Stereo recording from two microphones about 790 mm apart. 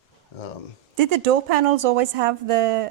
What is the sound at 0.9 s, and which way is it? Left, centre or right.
Speech, right.